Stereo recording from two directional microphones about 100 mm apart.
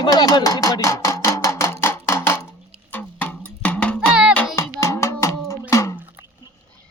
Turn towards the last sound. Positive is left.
turn(degrees=30)  # may be behind; listen again after turning